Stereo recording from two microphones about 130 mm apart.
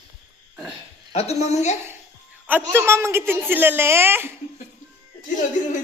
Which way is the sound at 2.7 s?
20° right (ahead or behind).